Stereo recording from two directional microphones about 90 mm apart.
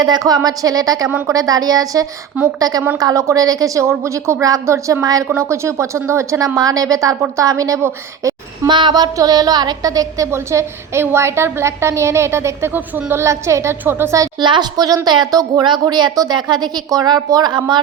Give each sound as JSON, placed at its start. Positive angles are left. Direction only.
{"t": 0.0, "sound": "a woman's voice", "side_deg": -50}
{"t": 6.6, "sound": "a woman's voice", "side_deg": -45}
{"t": 8.6, "sound": "a woman's voice", "side_deg": -55}
{"t": 10.3, "sound": "a woman's voice", "side_deg": -30}
{"t": 14.3, "sound": "a woman's voice", "side_deg": -55}